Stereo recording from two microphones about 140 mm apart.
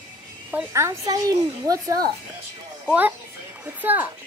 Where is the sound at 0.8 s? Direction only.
25° right (ahead or behind).